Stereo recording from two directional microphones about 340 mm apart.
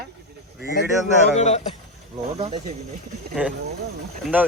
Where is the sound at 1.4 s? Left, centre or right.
Centre.